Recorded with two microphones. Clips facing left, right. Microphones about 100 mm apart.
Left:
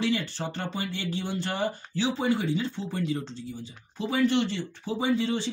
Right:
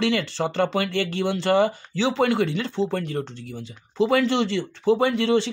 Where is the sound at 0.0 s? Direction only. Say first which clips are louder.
Right 5 dB; 90° right.